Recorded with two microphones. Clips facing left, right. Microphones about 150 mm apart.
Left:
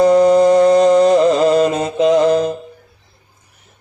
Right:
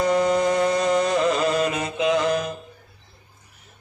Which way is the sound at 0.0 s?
35° left (ahead or behind).